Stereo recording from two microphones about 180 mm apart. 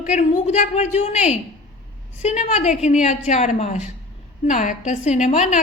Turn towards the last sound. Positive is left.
turn(degrees=40)  # may be behind; listen again after turning